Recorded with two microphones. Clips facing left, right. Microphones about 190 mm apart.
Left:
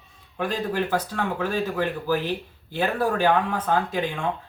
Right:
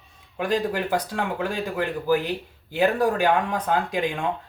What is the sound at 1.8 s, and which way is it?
Speech, 15° right (ahead or behind).